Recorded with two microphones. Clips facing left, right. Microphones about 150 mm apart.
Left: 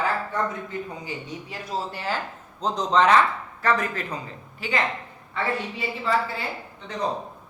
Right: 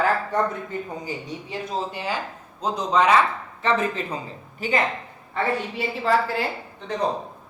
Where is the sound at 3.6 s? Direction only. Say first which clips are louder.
Right 1 dB; 25° right (ahead or behind).